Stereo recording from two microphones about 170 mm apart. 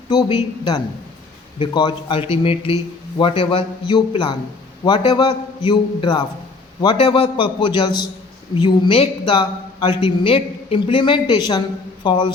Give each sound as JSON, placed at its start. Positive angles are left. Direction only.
{"t": 0.1, "sound": "a man's voice", "side_deg": 25}